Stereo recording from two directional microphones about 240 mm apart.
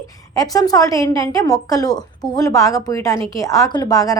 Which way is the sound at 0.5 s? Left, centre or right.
Centre.